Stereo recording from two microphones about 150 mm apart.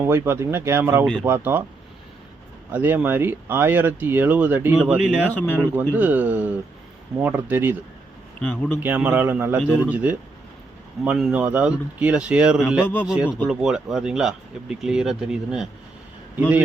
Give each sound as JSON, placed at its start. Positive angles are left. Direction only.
{"t": 0.0, "sound": "speech", "side_deg": -15}
{"t": 2.7, "sound": "speech", "side_deg": -15}
{"t": 5.3, "sound": "a man's voice", "side_deg": 10}
{"t": 5.9, "sound": "speech", "side_deg": -10}
{"t": 8.4, "sound": "a man's voice", "side_deg": 5}
{"t": 8.8, "sound": "speech", "side_deg": -10}
{"t": 12.8, "sound": "a man's voice", "side_deg": 10}
{"t": 13.1, "sound": "speech", "side_deg": -5}